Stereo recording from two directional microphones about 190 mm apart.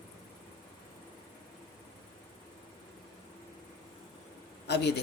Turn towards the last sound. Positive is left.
turn(degrees=65)  # may be behind; listen again after turning